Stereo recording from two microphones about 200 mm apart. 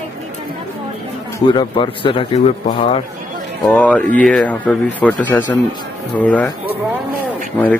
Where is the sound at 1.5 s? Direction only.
25° left (ahead or behind).